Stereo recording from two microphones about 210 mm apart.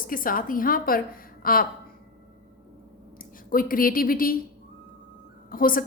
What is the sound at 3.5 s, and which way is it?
Speech, 40° left (ahead or behind).